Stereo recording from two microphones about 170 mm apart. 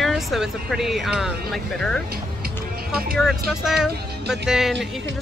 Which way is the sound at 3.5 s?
Centre (ahead or behind).